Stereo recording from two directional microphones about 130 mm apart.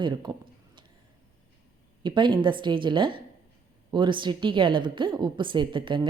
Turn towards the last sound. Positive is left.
turn(degrees=-40)  # may be behind; listen again after turning